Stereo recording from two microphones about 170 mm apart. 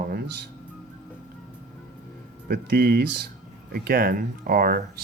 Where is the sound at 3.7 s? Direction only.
60° right (ahead or behind).